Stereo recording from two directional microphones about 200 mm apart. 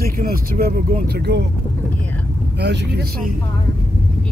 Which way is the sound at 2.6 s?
55° right (ahead or behind).